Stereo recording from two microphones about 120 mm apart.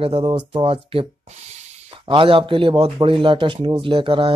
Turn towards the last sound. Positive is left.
turn(degrees=-45)  # may be behind; listen again after turning